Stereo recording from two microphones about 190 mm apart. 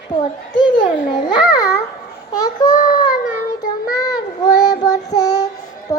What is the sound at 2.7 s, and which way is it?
Speech, 45° left (ahead or behind).